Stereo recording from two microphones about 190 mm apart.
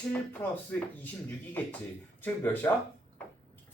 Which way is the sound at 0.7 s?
10° left (ahead or behind).